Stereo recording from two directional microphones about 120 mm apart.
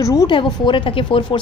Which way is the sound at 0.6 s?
45° left (ahead or behind).